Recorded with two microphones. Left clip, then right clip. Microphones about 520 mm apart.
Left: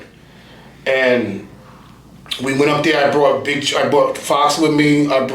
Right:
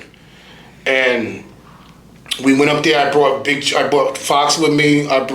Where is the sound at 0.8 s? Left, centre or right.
Right.